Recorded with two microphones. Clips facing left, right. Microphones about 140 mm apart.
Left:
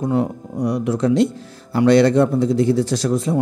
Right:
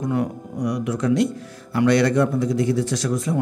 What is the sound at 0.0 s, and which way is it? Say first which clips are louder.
Speech: left 4 dB; 30° left (ahead or behind).